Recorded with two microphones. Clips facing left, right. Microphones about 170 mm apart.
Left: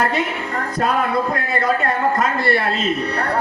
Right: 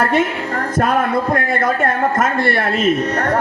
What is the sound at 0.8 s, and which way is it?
A man's voice, 50° right (ahead or behind).